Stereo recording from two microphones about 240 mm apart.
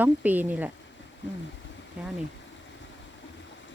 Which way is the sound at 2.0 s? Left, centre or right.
Centre.